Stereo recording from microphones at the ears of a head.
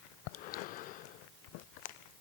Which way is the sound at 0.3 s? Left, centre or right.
Left.